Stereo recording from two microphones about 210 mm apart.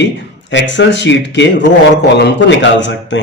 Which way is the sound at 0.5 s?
60° left (ahead or behind).